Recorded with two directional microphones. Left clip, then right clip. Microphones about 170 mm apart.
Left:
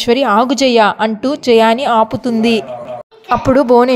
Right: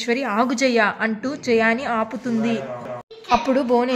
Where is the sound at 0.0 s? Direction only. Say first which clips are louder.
Left 10 dB; 35° left (ahead or behind).